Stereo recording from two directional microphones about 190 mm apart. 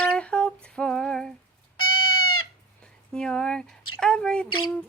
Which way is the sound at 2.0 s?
90° left.